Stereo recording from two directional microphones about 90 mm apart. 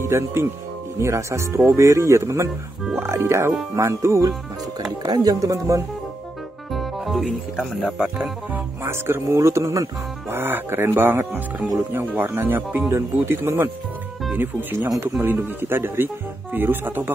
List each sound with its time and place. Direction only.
0.0 s speech: 30° right (ahead or behind)
6.7 s music: centre (ahead or behind)
7.8 s speech: 15° right (ahead or behind)